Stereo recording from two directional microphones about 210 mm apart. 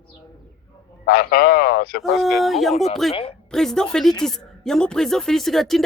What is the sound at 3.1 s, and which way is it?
Speech, 30° left (ahead or behind).